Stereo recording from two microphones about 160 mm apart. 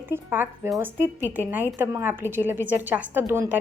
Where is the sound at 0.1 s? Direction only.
10° right (ahead or behind).